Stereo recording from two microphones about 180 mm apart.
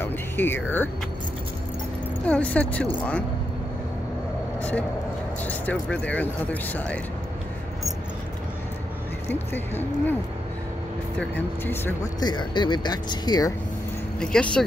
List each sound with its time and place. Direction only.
0.0 s speech: 10° left (ahead or behind)
2.2 s speech: 5° left (ahead or behind)
4.6 s speech: 10° left (ahead or behind)
9.3 s speech: 10° left (ahead or behind)
11.1 s speech: 10° left (ahead or behind)
14.2 s speech: 5° left (ahead or behind)